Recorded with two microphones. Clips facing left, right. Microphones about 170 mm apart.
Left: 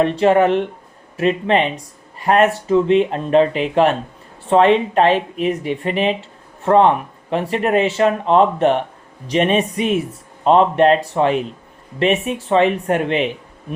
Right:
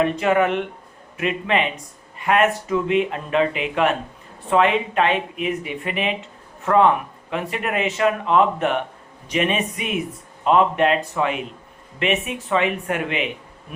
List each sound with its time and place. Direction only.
0.0 s speech: 30° left (ahead or behind)